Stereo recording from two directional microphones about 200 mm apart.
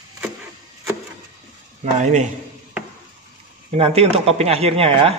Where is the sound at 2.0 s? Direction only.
35° right (ahead or behind).